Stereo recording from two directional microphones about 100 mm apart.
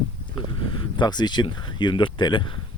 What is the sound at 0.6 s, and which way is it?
Speech, 55° left (ahead or behind).